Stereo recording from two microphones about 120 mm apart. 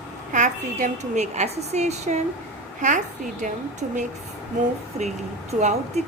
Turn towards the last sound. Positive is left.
turn(degrees=-70)  # may be behind; listen again after turning